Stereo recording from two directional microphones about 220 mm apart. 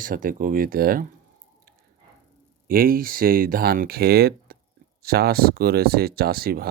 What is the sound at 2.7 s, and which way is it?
Speech, 40° right (ahead or behind).